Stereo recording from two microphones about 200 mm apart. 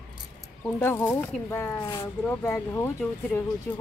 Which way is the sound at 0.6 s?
10° left (ahead or behind).